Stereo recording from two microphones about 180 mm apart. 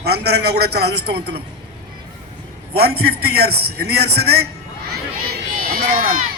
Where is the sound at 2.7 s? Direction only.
60° right (ahead or behind).